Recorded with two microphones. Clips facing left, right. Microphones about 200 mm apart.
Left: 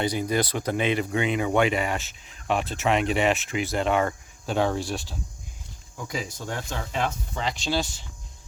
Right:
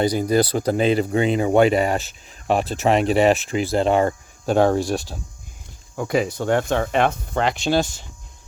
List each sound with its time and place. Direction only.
0.0 s speech: 40° right (ahead or behind)
4.5 s speech: 45° right (ahead or behind)
6.0 s speech: 65° right (ahead or behind); by 8.0 s 50° right (ahead or behind)